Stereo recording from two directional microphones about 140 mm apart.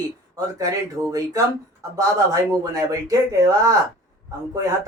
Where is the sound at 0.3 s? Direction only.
25° right (ahead or behind).